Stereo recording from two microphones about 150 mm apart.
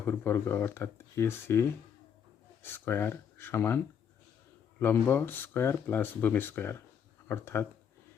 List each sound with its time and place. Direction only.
0.0 s speech: 15° left (ahead or behind)
4.8 s speech: 15° left (ahead or behind)